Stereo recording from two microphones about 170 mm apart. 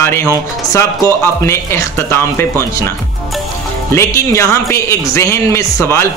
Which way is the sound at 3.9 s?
15° left (ahead or behind).